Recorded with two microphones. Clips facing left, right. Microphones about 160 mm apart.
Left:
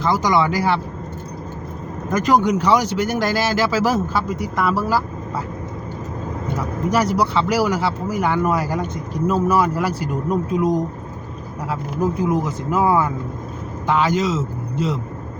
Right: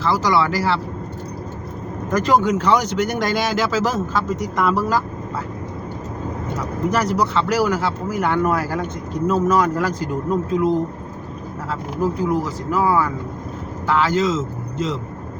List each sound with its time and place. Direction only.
0.0 s speech: 15° left (ahead or behind)
2.4 s speech: 10° left (ahead or behind)
6.9 s speech: 10° left (ahead or behind)
12.3 s speech: 20° left (ahead or behind)